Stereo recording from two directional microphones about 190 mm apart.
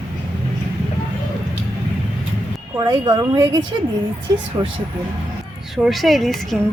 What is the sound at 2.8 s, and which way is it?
Speech, 25° right (ahead or behind).